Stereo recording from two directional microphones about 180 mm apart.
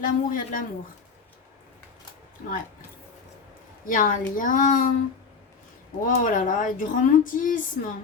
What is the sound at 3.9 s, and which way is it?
A woman's voice, 45° left (ahead or behind).